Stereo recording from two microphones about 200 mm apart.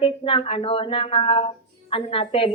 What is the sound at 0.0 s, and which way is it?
A woman's voice, 30° left (ahead or behind).